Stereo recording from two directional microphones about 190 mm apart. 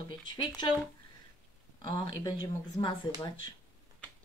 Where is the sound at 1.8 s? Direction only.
25° left (ahead or behind).